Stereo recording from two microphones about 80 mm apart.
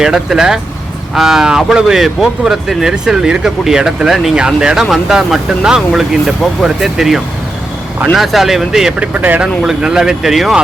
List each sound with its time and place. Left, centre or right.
0.0 s speech: centre
9.0 s speech: right
9.6 s speech: centre